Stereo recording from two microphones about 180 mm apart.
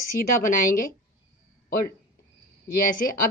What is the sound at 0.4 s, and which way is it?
Speech, 50° left (ahead or behind).